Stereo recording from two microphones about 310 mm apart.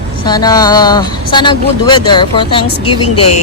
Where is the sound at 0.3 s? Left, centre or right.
Centre.